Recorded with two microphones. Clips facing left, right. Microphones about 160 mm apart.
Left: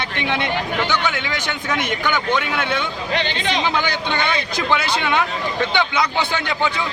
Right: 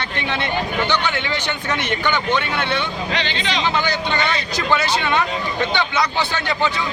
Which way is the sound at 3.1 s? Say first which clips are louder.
Left 4 dB; 50° left (ahead or behind).